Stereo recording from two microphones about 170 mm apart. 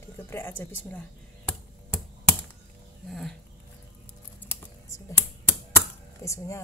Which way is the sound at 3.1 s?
Centre (ahead or behind).